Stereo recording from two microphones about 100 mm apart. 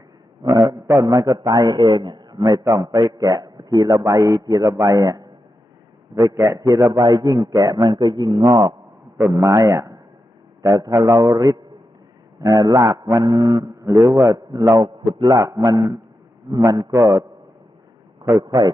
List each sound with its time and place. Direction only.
0.5 s a man's voice: 35° right (ahead or behind)
2.3 s a man's voice: 35° right (ahead or behind)
6.7 s a man's voice: 20° right (ahead or behind)
7.0 s a man's voice: 40° right (ahead or behind)
11.1 s a man's voice: 35° right (ahead or behind)
14.8 s a man's voice: 50° right (ahead or behind)
15.4 s a man's voice: 35° right (ahead or behind)